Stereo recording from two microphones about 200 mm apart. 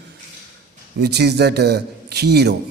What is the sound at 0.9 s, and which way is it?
A man's voice, 55° right (ahead or behind).